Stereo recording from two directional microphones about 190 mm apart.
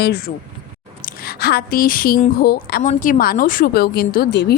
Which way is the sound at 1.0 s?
55° left (ahead or behind).